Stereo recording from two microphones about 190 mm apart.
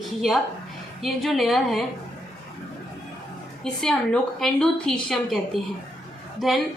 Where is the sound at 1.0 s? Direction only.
Centre (ahead or behind).